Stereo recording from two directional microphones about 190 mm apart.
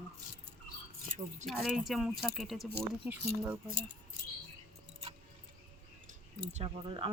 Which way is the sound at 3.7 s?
50° right (ahead or behind).